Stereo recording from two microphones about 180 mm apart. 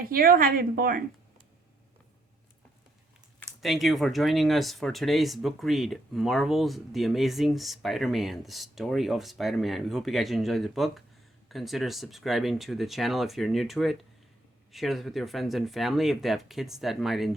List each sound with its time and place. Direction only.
0.0 s a woman's voice: 55° right (ahead or behind)
3.6 s speech: centre (ahead or behind)